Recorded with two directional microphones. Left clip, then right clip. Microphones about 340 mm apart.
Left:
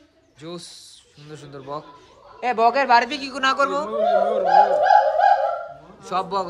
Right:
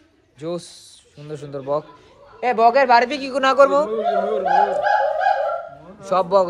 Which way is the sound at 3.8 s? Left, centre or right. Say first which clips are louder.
Left 1 dB; left.